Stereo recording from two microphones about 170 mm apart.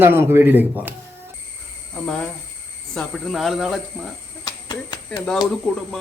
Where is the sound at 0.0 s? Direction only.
15° right (ahead or behind).